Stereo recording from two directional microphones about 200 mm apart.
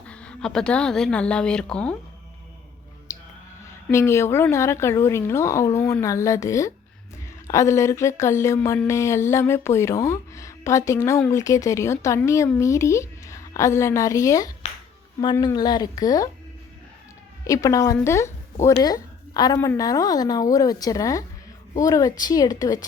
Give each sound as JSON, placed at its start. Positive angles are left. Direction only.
{"t": 0.1, "sound": "a woman's voice", "side_deg": 5}
{"t": 3.1, "sound": "a sound", "side_deg": 15}
{"t": 3.9, "sound": "speech", "side_deg": 15}
{"t": 17.4, "sound": "a woman's voice", "side_deg": 15}